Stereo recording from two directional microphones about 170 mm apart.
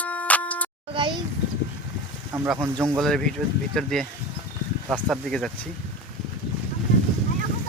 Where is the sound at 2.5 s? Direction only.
15° right (ahead or behind).